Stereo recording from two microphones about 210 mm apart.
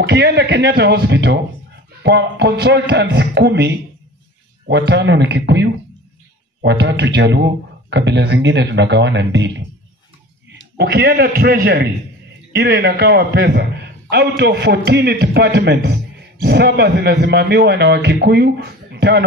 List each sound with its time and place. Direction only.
0.0 s a man's voice: 50° right (ahead or behind)
10.8 s a man's voice: 50° right (ahead or behind)